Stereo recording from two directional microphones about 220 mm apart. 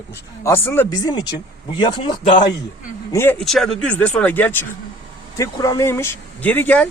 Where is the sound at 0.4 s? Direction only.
10° left (ahead or behind).